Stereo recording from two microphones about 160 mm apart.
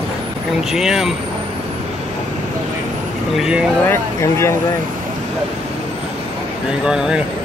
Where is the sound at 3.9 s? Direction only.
15° left (ahead or behind).